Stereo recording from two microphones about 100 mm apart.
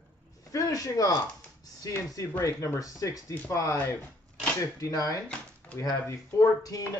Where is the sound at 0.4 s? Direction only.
35° left (ahead or behind).